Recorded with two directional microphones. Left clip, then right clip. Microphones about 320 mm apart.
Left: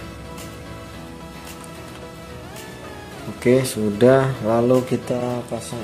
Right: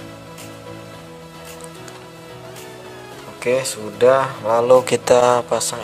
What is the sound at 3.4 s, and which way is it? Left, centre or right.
Speech, centre.